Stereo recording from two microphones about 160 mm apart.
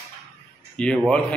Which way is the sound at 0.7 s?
5° left (ahead or behind).